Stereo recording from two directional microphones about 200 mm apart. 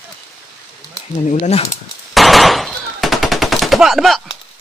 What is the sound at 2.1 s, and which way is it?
Machine gun, centre (ahead or behind).